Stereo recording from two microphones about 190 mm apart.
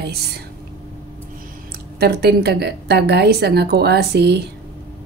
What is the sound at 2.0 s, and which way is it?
A woman's voice, 55° right (ahead or behind).